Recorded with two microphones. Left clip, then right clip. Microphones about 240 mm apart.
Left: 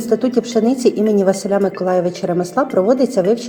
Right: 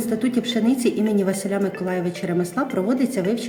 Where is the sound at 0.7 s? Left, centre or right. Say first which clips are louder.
Left 4 dB; centre.